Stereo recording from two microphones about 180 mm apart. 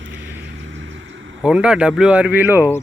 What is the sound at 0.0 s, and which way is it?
Vehicle, 90° right.